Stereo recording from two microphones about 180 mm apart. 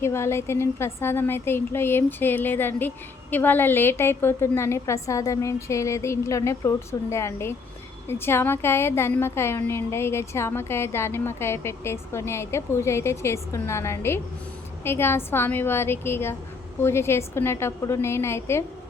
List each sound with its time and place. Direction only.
0.0 s a woman's voice: 15° left (ahead or behind)